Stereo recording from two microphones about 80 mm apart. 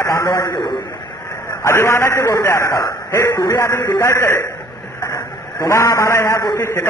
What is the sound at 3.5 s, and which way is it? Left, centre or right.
Speech, left.